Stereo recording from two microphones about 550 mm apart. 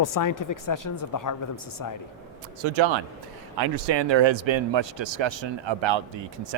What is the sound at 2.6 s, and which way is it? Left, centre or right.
Speech, right.